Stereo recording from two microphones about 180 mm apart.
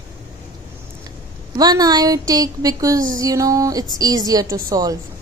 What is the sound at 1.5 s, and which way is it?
A woman's voice, 20° right (ahead or behind).